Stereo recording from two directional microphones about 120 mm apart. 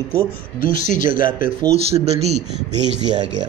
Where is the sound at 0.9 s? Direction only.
90° left.